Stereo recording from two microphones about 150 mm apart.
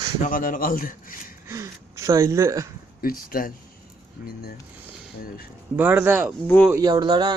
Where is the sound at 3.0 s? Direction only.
75° left (ahead or behind).